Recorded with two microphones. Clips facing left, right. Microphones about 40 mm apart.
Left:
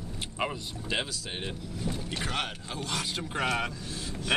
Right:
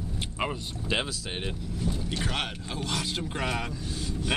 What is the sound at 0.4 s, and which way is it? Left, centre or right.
Vehicle, centre.